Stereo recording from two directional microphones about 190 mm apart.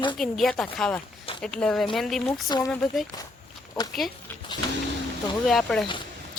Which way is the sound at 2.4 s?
20° left (ahead or behind).